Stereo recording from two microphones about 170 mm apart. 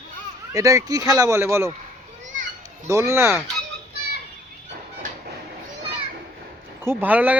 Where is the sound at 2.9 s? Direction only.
15° right (ahead or behind).